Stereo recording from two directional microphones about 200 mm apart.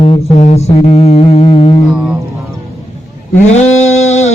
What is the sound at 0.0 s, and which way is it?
Music, 30° left (ahead or behind).